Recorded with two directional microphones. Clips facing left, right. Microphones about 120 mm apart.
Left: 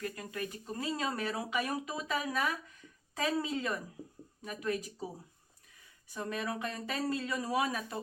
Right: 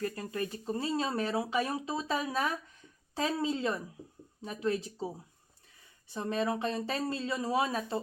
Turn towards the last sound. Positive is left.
turn(degrees=-30)  # may be behind; listen again after turning